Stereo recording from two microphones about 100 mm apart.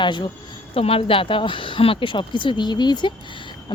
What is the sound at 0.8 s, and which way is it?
Speech, 75° left (ahead or behind).